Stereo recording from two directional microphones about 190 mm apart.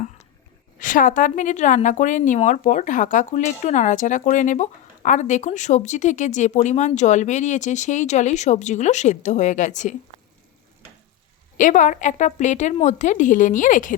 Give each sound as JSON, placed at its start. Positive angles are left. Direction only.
{"t": 0.8, "sound": "a woman's voice", "side_deg": 45}
{"t": 11.5, "sound": "a woman's voice", "side_deg": 40}